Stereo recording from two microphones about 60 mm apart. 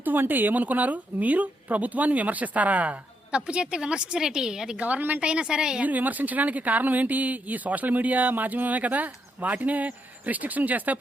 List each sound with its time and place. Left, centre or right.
0.0 s speech: right; by 4.8 s centre
4.8 s speech: right
5.2 s a woman's voice: centre
5.8 s speech: right